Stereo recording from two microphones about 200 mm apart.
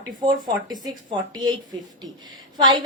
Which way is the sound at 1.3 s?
20° right (ahead or behind).